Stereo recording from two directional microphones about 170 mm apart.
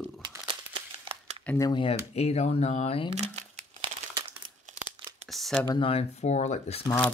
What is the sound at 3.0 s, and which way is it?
Speech, 35° right (ahead or behind).